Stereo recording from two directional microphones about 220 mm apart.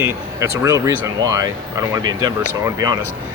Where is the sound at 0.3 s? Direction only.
15° right (ahead or behind).